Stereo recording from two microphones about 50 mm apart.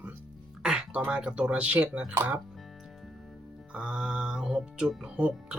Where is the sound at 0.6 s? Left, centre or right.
Centre.